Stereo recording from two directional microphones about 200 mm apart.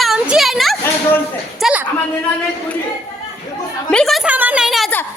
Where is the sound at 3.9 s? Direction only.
Centre (ahead or behind).